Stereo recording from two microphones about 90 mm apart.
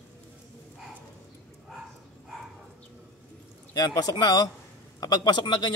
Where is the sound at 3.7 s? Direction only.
45° left (ahead or behind).